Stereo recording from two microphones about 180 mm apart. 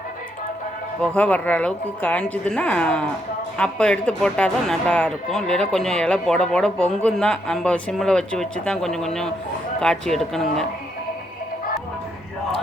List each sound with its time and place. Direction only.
1.0 s a woman's voice: 5° left (ahead or behind)